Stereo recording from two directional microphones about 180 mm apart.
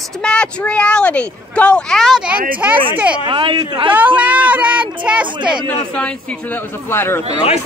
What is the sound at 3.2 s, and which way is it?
Speech, 25° right (ahead or behind).